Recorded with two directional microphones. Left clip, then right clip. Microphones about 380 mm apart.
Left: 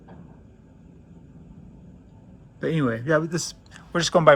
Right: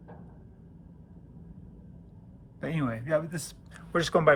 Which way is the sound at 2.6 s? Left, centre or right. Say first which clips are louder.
Left 8 dB; centre.